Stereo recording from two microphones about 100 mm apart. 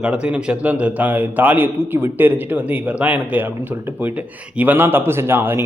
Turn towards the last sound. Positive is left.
turn(degrees=-20)  # may be behind; listen again after turning